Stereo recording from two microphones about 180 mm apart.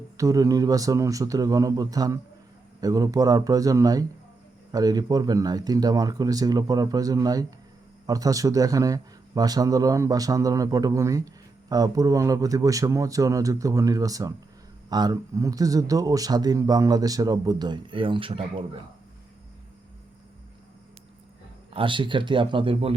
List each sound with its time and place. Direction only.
0.2 s speech: 20° right (ahead or behind)
21.7 s speech: 30° right (ahead or behind)